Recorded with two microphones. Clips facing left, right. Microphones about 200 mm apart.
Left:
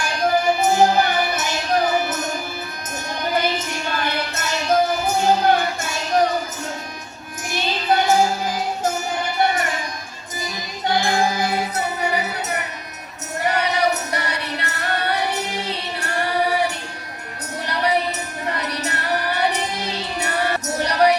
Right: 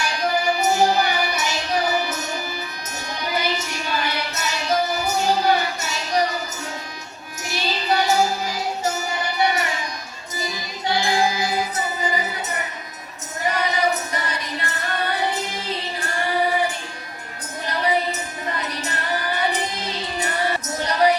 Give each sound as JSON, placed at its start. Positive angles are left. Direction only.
{"t": 0.0, "sound": "music", "side_deg": 50}
{"t": 3.2, "sound": "child singing", "side_deg": 50}
{"t": 7.5, "sound": "music", "side_deg": 50}
{"t": 10.8, "sound": "music", "side_deg": 50}
{"t": 18.4, "sound": "music", "side_deg": 70}